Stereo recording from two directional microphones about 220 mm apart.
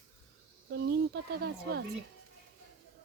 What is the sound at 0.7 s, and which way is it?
Speech, 45° right (ahead or behind).